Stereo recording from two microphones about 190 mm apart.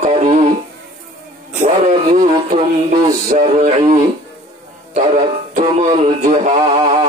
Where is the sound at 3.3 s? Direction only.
40° right (ahead or behind).